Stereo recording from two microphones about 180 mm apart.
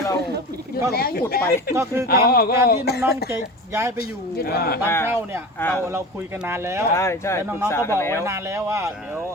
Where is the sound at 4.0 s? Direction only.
60° left (ahead or behind).